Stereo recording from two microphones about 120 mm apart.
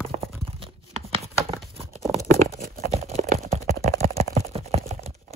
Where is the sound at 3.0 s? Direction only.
60° right (ahead or behind).